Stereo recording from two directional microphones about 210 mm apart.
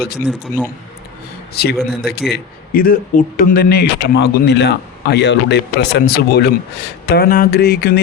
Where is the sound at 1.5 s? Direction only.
50° left (ahead or behind).